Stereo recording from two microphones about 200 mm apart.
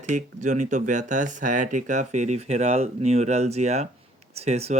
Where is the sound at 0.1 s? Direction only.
35° right (ahead or behind).